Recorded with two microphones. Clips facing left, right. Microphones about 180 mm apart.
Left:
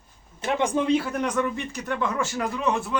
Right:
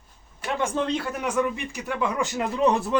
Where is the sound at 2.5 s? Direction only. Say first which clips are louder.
Right 6 dB; 35° right (ahead or behind).